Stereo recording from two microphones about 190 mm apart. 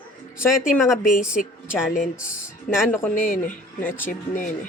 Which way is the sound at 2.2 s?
45° left (ahead or behind).